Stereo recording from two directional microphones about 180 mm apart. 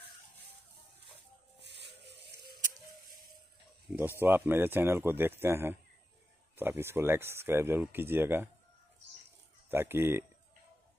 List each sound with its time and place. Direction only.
1.6 s a sound: 70° right (ahead or behind)
4.2 s speech: 10° right (ahead or behind)
9.7 s speech: 10° right (ahead or behind)